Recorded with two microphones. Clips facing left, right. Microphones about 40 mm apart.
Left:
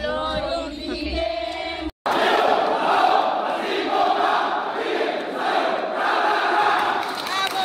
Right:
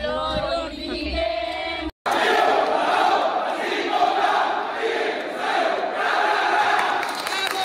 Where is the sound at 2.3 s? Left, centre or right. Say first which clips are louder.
Right 1 dB; left.